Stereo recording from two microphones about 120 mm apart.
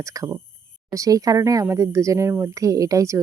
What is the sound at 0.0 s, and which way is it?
Speech, 25° right (ahead or behind).